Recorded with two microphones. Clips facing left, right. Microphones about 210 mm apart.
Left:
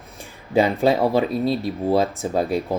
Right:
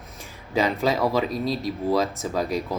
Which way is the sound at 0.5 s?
30° left (ahead or behind).